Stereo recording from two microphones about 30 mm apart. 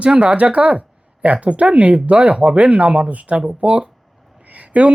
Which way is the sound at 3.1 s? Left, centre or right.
Right.